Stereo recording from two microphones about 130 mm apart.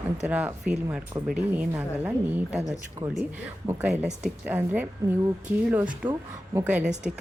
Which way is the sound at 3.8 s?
10° right (ahead or behind).